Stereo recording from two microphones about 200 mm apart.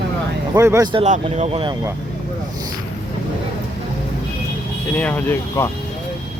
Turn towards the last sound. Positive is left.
turn(degrees=10)  # may be behind; listen again after turning